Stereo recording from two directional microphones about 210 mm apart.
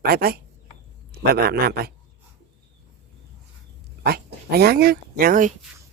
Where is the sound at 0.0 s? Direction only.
45° right (ahead or behind).